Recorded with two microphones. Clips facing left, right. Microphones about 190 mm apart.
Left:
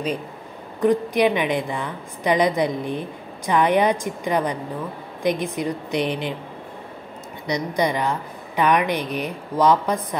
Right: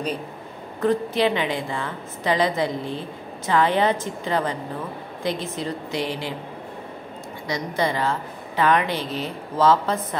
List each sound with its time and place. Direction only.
0.7 s a woman's voice: 15° left (ahead or behind)
7.4 s a woman's voice: 15° left (ahead or behind)